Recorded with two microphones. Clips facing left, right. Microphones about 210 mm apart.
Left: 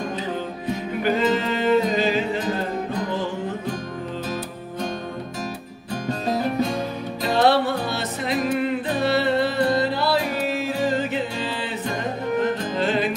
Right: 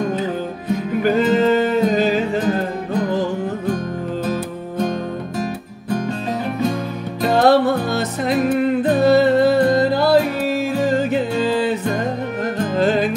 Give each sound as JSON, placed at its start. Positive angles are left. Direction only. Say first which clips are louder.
{"t": 1.0, "sound": "music", "louder": "right 6 dB", "side_deg": -45}
{"t": 4.3, "sound": "music", "louder": "right 6 dB", "side_deg": -55}
{"t": 7.2, "sound": "music", "louder": "right 5 dB", "side_deg": -45}
{"t": 12.7, "sound": "music", "louder": "right 8 dB", "side_deg": -45}